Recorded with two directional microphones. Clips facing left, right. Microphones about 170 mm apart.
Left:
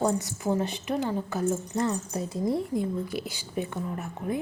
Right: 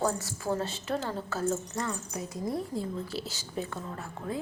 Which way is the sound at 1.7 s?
30° left (ahead or behind).